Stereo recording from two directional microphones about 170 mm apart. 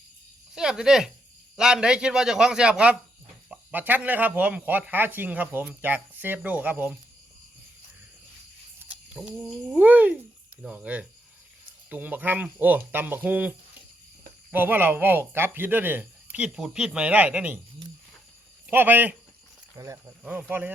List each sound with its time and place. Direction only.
0.5 s speech: 5° right (ahead or behind)
8.8 s speech: 10° right (ahead or behind)
18.7 s speech: 10° right (ahead or behind)